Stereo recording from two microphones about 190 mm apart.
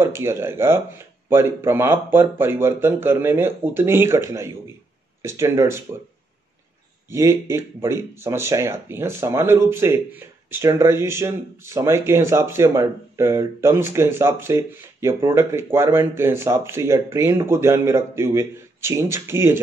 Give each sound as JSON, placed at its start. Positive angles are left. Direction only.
{"t": 0.0, "sound": "speech", "side_deg": -15}
{"t": 7.1, "sound": "speech", "side_deg": -15}